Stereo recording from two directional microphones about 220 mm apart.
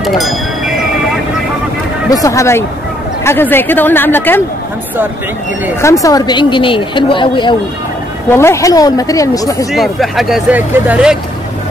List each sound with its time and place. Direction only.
0.0 s a sound: centre (ahead or behind)
2.0 s speech: 15° left (ahead or behind)
5.8 s a woman's voice: 15° left (ahead or behind)
9.7 s speech: centre (ahead or behind)